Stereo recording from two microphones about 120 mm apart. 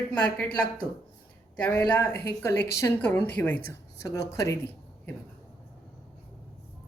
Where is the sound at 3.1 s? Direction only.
10° left (ahead or behind).